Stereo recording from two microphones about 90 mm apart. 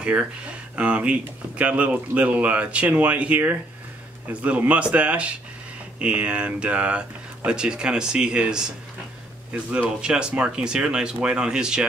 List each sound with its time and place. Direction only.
0.0 s speech: 10° right (ahead or behind)
9.7 s speech: 10° right (ahead or behind)